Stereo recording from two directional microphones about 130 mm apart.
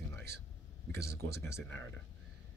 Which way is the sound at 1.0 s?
20° left (ahead or behind).